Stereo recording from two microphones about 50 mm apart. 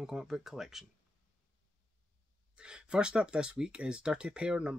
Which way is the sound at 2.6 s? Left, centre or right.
Centre.